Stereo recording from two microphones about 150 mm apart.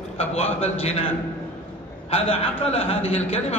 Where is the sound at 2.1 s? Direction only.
40° left (ahead or behind).